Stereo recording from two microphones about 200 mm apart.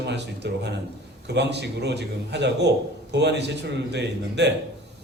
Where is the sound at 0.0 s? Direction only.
55° right (ahead or behind).